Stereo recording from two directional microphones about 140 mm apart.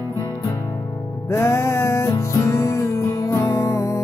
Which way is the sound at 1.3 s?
20° left (ahead or behind).